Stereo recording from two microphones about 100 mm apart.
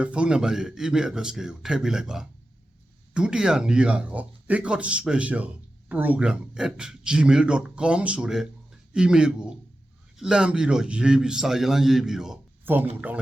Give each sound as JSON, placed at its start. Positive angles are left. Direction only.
{"t": 0.0, "sound": "a man's voice", "side_deg": -10}
{"t": 12.6, "sound": "speech", "side_deg": -20}